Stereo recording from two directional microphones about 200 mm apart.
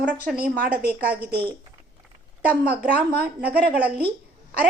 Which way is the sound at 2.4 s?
5° right (ahead or behind).